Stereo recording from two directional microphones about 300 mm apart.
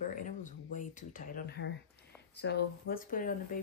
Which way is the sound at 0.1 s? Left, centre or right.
Left.